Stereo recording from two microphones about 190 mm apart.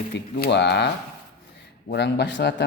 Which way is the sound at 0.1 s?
60° left (ahead or behind).